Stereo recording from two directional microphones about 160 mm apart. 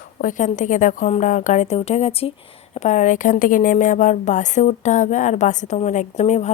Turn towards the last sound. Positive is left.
turn(degrees=45)  # may be behind; listen again after turning